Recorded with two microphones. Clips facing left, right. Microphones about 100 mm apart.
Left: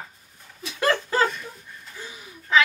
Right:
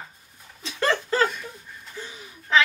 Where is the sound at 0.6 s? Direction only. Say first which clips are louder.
Left 1 dB; 10° left (ahead or behind).